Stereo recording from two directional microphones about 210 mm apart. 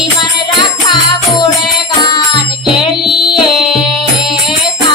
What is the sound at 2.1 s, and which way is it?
Music, 20° left (ahead or behind).